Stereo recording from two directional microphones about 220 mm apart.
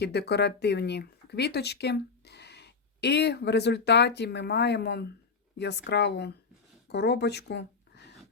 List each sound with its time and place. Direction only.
0.0 s speech: 50° left (ahead or behind)